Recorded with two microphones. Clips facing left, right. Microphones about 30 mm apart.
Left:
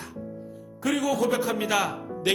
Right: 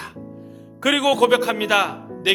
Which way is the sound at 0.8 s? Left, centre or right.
Right.